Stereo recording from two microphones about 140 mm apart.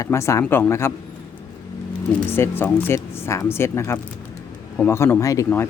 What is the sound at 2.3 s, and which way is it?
Speech, 15° left (ahead or behind).